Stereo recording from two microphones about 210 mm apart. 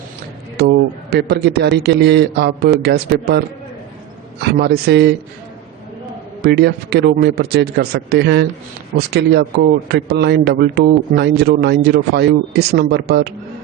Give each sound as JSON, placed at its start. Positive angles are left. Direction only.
{"t": 0.5, "sound": "a man's voice", "side_deg": -50}
{"t": 6.4, "sound": "a man's voice", "side_deg": -50}